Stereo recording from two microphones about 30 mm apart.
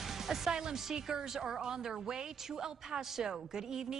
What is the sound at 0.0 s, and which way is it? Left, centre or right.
Music, centre.